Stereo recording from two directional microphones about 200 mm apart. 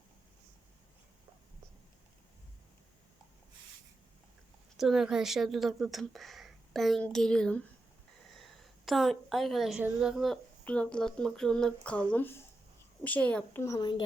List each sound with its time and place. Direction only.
4.8 s a woman's voice: centre (ahead or behind); by 14.0 s 20° left (ahead or behind)